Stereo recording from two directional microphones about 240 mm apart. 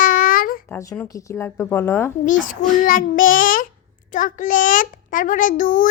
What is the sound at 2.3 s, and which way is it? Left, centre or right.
Child singing, left.